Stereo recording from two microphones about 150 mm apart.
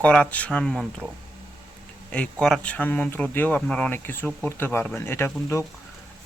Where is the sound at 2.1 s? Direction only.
5° left (ahead or behind).